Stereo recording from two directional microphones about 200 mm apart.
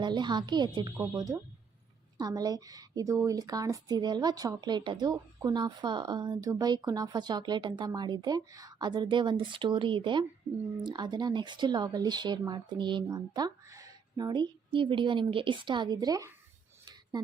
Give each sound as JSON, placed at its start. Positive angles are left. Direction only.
{"t": 0.0, "sound": "speech", "side_deg": -20}